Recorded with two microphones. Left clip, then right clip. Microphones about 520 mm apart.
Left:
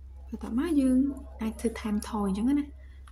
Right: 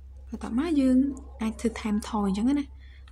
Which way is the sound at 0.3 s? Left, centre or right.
Left.